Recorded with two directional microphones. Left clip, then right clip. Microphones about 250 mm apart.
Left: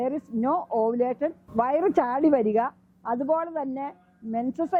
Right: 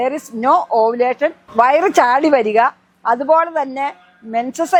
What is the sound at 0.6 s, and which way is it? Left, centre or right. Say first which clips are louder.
Speech: right 11 dB; right.